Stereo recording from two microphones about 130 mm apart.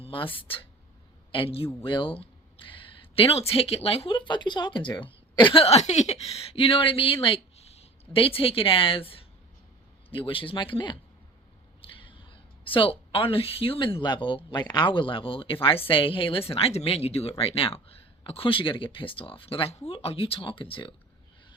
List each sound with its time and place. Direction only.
0.0 s a woman's voice: 40° left (ahead or behind)